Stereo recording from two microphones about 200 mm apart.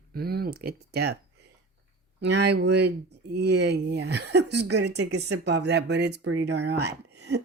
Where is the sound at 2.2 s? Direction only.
60° right (ahead or behind).